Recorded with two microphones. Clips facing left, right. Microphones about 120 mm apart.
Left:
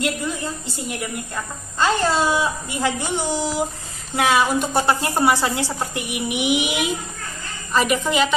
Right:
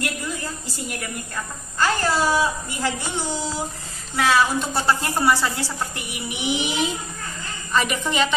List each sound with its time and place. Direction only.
0.0 s a woman's voice: 20° left (ahead or behind); by 8.4 s 5° left (ahead or behind)